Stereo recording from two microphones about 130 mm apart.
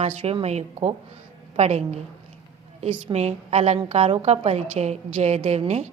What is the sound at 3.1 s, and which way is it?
A woman's voice, 55° right (ahead or behind).